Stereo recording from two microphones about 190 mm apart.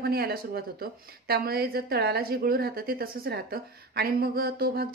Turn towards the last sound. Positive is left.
turn(degrees=-55)  # may be behind; listen again after turning